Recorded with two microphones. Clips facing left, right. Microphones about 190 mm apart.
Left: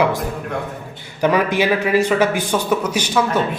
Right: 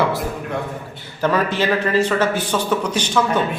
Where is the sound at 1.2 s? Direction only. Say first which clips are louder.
Left 2 dB; 15° left (ahead or behind).